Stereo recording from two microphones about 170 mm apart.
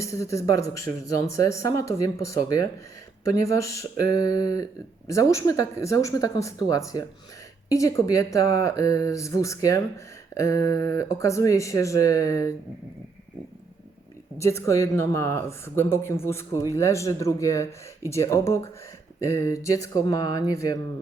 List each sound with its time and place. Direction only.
0.0 s speech: 20° left (ahead or behind)
14.3 s speech: 15° left (ahead or behind)